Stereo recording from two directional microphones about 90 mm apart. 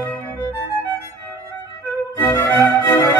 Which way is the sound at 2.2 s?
25° left (ahead or behind).